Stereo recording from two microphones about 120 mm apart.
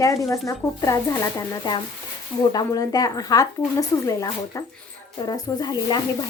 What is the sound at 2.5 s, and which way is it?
A woman's voice, 30° left (ahead or behind).